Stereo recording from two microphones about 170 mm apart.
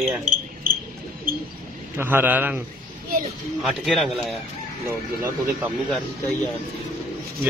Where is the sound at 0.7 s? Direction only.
55° right (ahead or behind).